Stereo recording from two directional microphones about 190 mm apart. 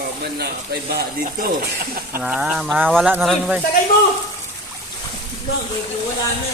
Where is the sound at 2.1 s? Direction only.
5° right (ahead or behind).